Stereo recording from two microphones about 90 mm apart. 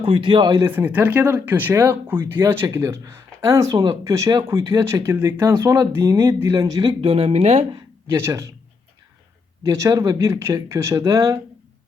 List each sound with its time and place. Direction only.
0.0 s a man's voice: 70° right (ahead or behind)
0.6 s speech: 25° right (ahead or behind); by 6.9 s 40° right (ahead or behind)
7.0 s speech: 90° right
8.0 s speech: 30° right (ahead or behind)
9.6 s speech: 40° right (ahead or behind)